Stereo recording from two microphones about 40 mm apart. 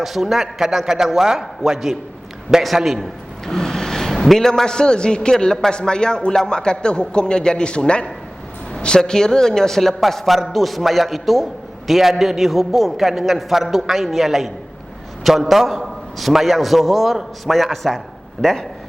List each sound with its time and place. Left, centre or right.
0.0 s a man's voice: centre
3.4 s a man's voice: centre